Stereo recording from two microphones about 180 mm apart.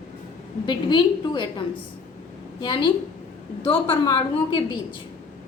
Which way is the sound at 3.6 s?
30° left (ahead or behind).